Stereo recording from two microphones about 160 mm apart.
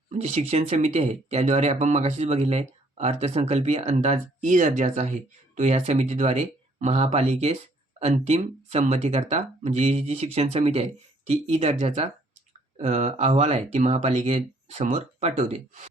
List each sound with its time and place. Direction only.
0.1 s speech: 45° right (ahead or behind)